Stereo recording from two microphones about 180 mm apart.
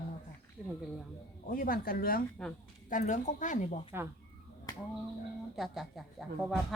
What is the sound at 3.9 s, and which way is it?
Speech, 10° right (ahead or behind).